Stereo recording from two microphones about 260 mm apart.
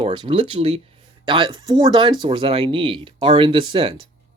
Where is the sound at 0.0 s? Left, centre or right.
Centre.